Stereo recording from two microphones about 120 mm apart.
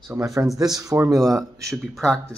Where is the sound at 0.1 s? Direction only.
25° right (ahead or behind).